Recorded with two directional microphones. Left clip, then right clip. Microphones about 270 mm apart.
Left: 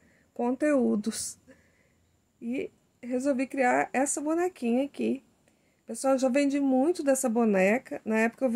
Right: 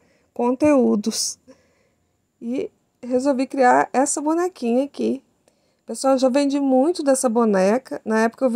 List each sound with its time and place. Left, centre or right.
0.3 s a woman's voice: right
2.4 s a woman's voice: right
7.0 s speech: centre
7.3 s a woman's voice: centre